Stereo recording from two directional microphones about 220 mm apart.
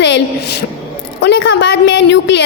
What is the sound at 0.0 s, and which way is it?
A woman's voice, 50° left (ahead or behind).